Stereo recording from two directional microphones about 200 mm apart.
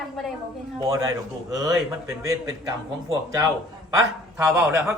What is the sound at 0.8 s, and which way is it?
A man's voice, 15° right (ahead or behind).